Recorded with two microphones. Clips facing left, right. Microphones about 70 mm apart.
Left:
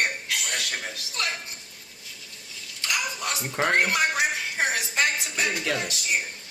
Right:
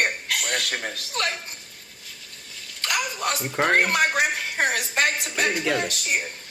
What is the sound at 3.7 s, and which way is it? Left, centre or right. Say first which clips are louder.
A woman's voice: right 2 dB; right.